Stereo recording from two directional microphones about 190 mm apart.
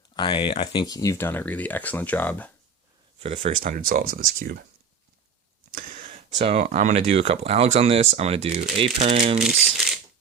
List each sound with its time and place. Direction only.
0.2 s speech: 25° left (ahead or behind); by 2.5 s 10° left (ahead or behind)
3.2 s speech: 30° right (ahead or behind)
3.5 s speech: 45° right (ahead or behind)
5.7 s speech: 45° right (ahead or behind)
9.4 s speech: centre (ahead or behind)